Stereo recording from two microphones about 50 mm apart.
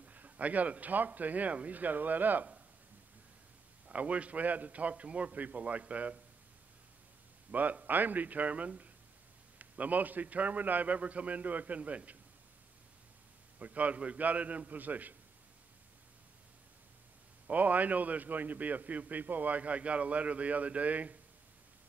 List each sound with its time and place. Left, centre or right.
0.0 s a man's voice: right
3.8 s a man's voice: right
7.5 s a man's voice: right
13.6 s a man's voice: right
17.5 s a man's voice: right